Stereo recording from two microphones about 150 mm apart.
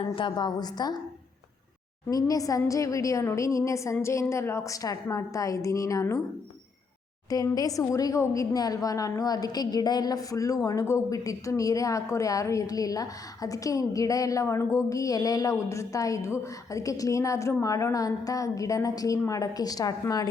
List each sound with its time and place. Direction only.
0.0 s a woman's voice: 30° left (ahead or behind)
2.0 s a woman's voice: 25° left (ahead or behind)
7.3 s a woman's voice: 25° left (ahead or behind)